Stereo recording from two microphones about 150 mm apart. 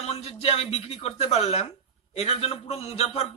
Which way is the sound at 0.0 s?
45° left (ahead or behind).